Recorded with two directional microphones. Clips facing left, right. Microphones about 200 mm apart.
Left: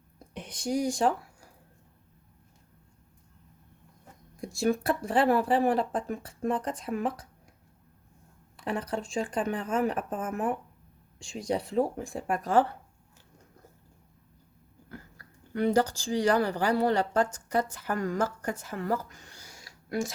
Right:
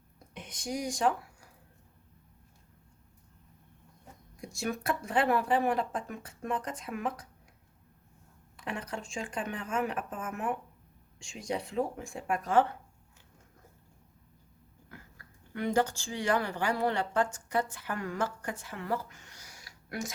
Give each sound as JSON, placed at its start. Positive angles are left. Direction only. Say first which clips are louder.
{"t": 0.3, "sound": "speech", "louder": "left 6 dB", "side_deg": 30}
{"t": 4.4, "sound": "speech", "louder": "left 8 dB", "side_deg": 30}
{"t": 8.6, "sound": "speech", "louder": "left 6 dB", "side_deg": 35}
{"t": 14.8, "sound": "speech", "louder": "left 6 dB", "side_deg": 35}